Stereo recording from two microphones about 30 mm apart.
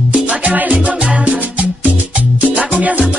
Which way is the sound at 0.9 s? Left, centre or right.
Right.